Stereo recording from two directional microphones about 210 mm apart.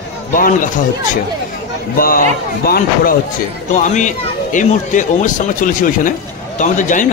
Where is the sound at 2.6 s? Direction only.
45° left (ahead or behind).